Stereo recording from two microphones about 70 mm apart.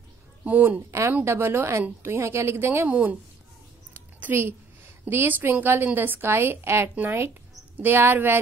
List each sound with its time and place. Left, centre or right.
0.4 s speech: right
1.2 s a woman's voice: right
2.9 s a woman's voice: right
3.9 s a sound: right
5.0 s a woman's voice: right